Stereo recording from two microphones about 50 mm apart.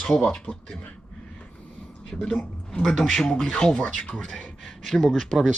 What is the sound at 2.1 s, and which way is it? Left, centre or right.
Speech, centre.